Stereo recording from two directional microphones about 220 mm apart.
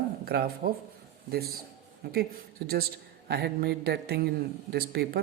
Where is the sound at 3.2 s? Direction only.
50° right (ahead or behind).